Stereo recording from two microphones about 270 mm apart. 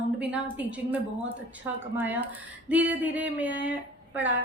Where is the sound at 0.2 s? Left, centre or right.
Centre.